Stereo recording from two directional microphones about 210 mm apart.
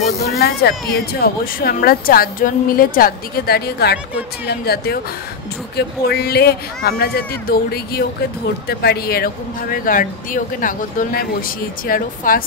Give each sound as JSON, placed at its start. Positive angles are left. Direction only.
{"t": 0.4, "sound": "speech", "side_deg": 50}